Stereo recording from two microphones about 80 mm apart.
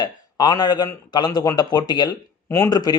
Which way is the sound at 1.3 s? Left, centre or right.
Left.